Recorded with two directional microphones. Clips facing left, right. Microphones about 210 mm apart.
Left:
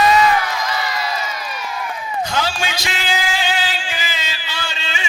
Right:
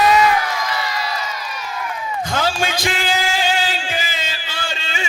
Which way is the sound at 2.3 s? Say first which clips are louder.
Right 4 dB; 50° right (ahead or behind).